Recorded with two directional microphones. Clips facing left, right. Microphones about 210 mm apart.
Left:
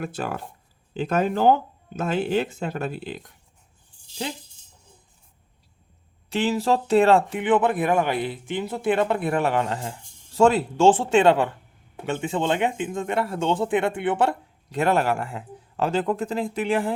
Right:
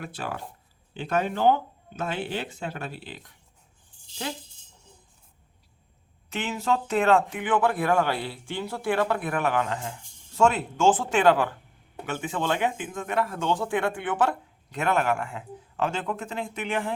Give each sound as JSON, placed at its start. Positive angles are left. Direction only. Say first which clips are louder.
{"t": 0.0, "sound": "speech", "louder": "left 5 dB", "side_deg": 45}
{"t": 6.3, "sound": "speech", "louder": "left 5 dB", "side_deg": 35}